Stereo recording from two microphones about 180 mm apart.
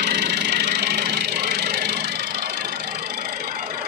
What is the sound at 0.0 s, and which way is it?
Vehicle, 65° right (ahead or behind).